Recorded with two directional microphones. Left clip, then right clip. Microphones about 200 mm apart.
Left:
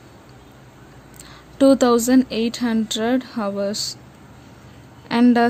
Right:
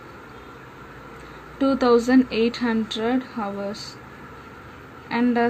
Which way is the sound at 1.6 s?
60° left (ahead or behind).